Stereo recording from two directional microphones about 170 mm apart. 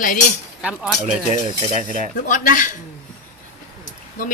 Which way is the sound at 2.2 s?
50° left (ahead or behind).